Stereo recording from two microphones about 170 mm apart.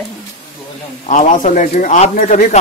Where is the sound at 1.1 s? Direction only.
45° left (ahead or behind).